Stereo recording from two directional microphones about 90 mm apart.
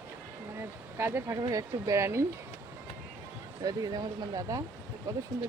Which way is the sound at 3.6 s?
45° right (ahead or behind).